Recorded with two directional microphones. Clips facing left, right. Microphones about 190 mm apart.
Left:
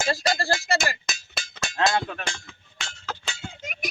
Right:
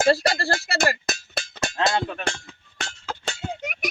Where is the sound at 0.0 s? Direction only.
65° right (ahead or behind).